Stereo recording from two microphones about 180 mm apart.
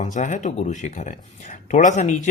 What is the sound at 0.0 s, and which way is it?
Speech, 40° left (ahead or behind).